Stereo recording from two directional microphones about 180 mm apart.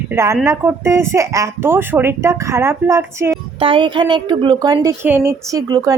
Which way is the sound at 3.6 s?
30° right (ahead or behind).